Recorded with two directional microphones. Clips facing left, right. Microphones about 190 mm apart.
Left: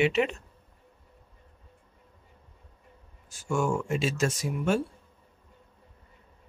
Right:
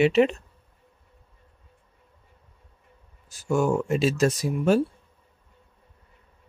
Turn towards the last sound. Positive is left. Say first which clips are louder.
# right 5 dB
turn(degrees=-35)  # may be behind; listen again after turning